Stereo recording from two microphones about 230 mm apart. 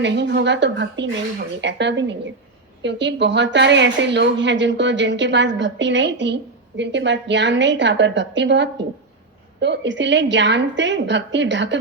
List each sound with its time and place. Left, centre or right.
0.0 s a woman's voice: right